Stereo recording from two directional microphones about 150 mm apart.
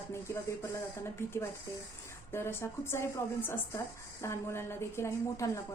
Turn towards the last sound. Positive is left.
turn(degrees=15)  # may be behind; listen again after turning